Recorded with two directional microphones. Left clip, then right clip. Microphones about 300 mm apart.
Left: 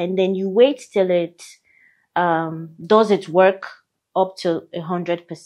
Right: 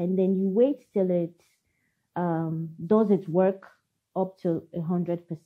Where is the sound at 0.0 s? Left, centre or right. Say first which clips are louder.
Left 6 dB; centre.